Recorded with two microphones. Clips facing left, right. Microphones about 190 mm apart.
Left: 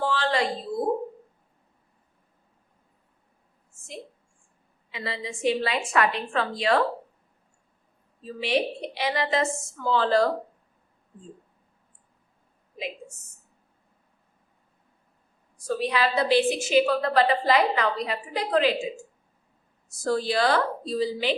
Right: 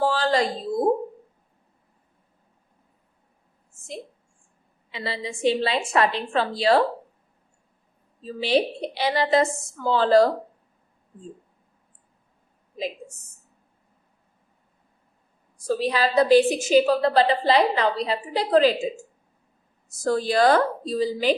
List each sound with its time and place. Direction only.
0.0 s a sound: 40° right (ahead or behind)
4.9 s a woman's voice: 30° right (ahead or behind)
8.2 s a woman's voice: 30° right (ahead or behind)
15.6 s a woman's voice: 35° right (ahead or behind)
20.1 s speech: 45° right (ahead or behind)